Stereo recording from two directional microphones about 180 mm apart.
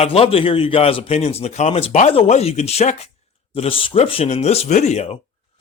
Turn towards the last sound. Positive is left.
turn(degrees=35)  # may be behind; listen again after turning